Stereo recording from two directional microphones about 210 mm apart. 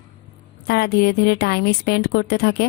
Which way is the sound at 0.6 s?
50° left (ahead or behind).